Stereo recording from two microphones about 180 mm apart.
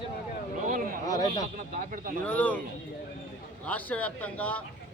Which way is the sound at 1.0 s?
20° left (ahead or behind).